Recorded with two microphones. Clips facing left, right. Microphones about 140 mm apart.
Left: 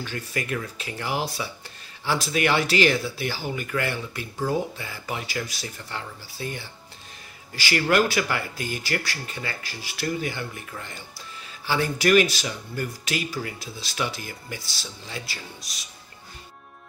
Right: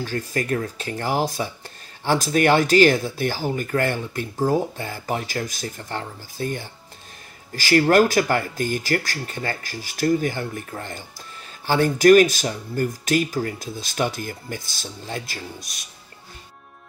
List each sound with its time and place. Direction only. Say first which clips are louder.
0.0 s speech: right 5 dB; 40° right (ahead or behind)